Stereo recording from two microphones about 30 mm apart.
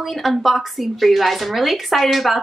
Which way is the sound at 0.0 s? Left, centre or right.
Centre.